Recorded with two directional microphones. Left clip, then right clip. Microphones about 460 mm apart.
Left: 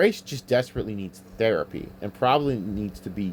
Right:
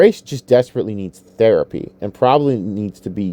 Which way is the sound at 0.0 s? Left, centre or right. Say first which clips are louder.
Right 10 dB; centre.